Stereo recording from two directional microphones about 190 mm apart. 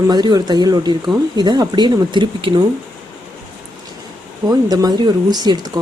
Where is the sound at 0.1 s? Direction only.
20° right (ahead or behind).